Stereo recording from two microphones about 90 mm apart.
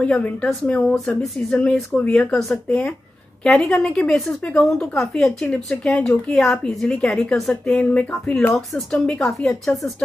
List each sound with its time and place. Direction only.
0.0 s a woman's voice: 10° left (ahead or behind)
7.8 s speech: 15° left (ahead or behind)
9.2 s a woman's voice: 5° left (ahead or behind)